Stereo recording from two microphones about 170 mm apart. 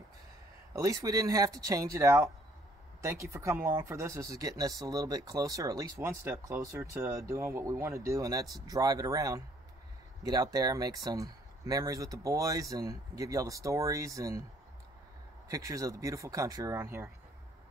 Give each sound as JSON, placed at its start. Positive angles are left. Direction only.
{"t": 0.7, "sound": "speech", "side_deg": -20}
{"t": 15.4, "sound": "speech", "side_deg": -20}